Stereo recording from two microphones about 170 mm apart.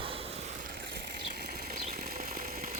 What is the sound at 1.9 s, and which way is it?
Engine, 60° right (ahead or behind).